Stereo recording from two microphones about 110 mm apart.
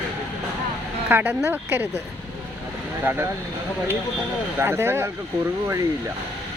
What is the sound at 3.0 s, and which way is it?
Speech, 20° right (ahead or behind).